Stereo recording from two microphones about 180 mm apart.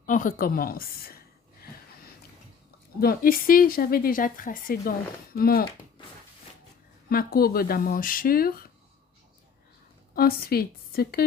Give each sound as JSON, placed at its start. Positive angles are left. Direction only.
{"t": 0.0, "sound": "speech", "side_deg": 45}
{"t": 3.0, "sound": "speech", "side_deg": 55}
{"t": 7.1, "sound": "speech", "side_deg": 55}
{"t": 10.2, "sound": "speech", "side_deg": 55}